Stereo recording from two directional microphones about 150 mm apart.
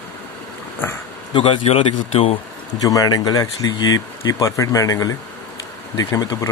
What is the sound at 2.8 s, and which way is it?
Speech, 25° left (ahead or behind).